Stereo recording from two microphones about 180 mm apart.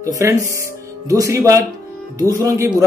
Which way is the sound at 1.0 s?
15° right (ahead or behind).